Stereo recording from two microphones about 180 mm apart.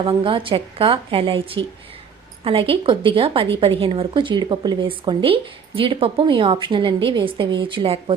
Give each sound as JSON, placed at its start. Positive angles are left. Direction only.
{"t": 0.0, "sound": "a woman's voice", "side_deg": -30}